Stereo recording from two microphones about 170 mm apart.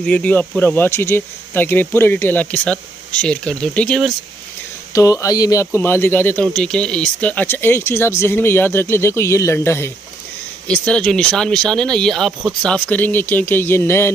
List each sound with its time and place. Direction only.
0.0 s speech: 10° left (ahead or behind)
4.9 s speech: 20° left (ahead or behind)